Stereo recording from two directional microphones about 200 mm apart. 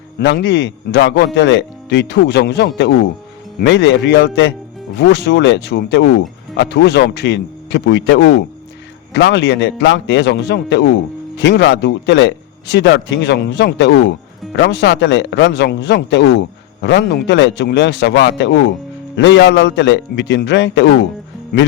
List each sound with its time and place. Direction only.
0.2 s a man's voice: 65° left (ahead or behind)